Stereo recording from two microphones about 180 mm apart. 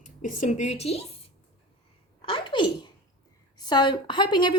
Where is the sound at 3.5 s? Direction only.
25° left (ahead or behind).